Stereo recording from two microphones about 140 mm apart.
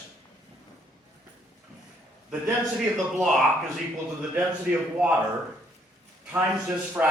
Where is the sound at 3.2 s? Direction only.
Centre (ahead or behind).